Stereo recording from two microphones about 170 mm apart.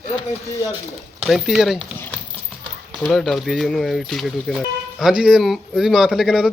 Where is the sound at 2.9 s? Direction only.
Centre (ahead or behind).